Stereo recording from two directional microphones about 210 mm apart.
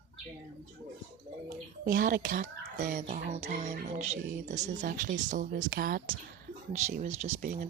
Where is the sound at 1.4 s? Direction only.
45° right (ahead or behind).